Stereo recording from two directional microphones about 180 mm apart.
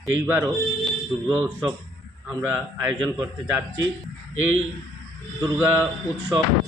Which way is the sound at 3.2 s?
20° right (ahead or behind).